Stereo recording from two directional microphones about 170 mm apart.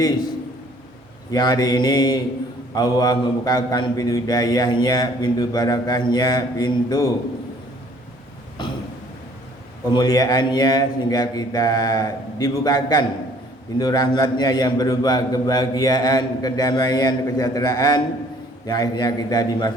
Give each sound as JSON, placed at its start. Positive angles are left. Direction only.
{"t": 1.3, "sound": "a man's voice", "side_deg": 25}
{"t": 9.9, "sound": "a man's voice", "side_deg": 25}